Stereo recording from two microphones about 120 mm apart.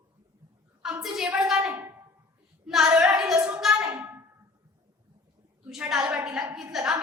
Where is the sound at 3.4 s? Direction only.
5° right (ahead or behind).